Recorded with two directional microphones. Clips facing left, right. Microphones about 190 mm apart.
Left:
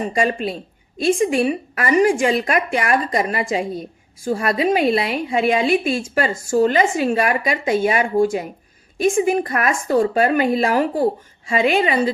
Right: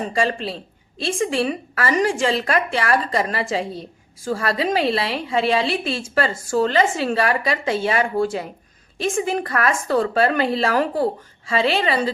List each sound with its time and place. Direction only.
0.1 s a woman's voice: 15° left (ahead or behind)